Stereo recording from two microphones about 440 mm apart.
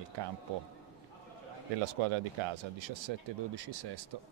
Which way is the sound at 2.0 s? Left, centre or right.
Right.